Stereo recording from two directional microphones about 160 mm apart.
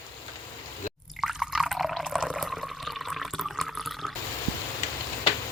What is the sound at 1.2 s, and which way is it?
Liquid, 5° right (ahead or behind).